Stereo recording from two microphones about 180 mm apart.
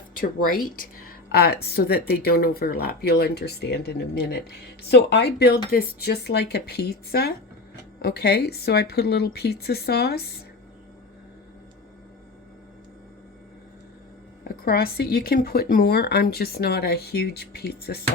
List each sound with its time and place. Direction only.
0.2 s speech: 50° left (ahead or behind)
4.9 s speech: 70° left (ahead or behind)
14.4 s speech: 60° left (ahead or behind)